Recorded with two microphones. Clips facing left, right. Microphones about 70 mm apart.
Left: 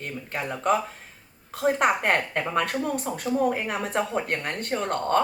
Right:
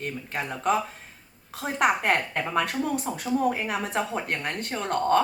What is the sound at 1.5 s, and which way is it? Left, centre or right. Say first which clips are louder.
Speech: left 2 dB; left.